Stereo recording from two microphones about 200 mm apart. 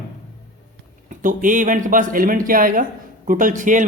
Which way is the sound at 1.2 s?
40° right (ahead or behind).